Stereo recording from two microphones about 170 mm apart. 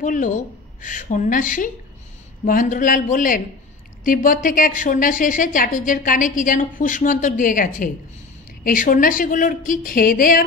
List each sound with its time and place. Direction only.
0.0 s a woman's voice: 50° left (ahead or behind)